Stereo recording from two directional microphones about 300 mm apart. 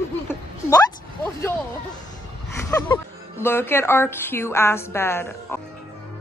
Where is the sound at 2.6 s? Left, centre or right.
Centre.